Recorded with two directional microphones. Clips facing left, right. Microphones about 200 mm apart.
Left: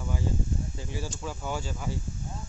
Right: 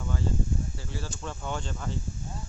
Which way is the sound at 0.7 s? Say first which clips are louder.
Left 2 dB; 15° left (ahead or behind).